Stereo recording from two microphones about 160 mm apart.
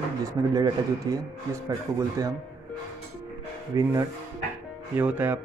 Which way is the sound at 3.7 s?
20° right (ahead or behind).